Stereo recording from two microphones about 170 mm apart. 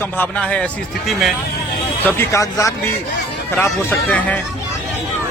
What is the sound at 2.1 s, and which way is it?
Speech, 15° left (ahead or behind).